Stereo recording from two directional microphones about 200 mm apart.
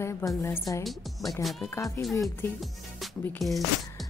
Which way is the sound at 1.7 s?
15° left (ahead or behind).